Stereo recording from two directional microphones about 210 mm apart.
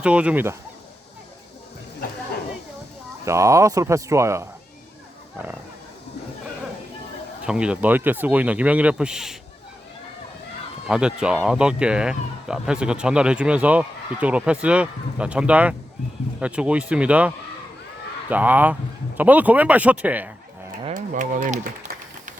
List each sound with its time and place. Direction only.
0.0 s speech: 5° right (ahead or behind)
3.2 s speech: 15° right (ahead or behind)
7.4 s speech: 5° right (ahead or behind)
10.8 s speech: 5° right (ahead or behind)
20.9 s speech: 40° right (ahead or behind)